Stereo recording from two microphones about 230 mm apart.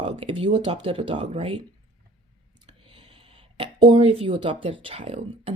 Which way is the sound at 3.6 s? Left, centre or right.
Right.